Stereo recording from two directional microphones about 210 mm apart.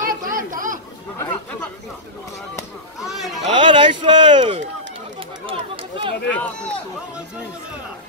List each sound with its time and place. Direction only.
0.0 s chatter: 40° right (ahead or behind)
1.1 s speech: 10° left (ahead or behind)
3.0 s children playing: centre (ahead or behind)
3.4 s a sound: 25° right (ahead or behind)
5.5 s chatter: 25° right (ahead or behind)
6.3 s speech: 5° left (ahead or behind)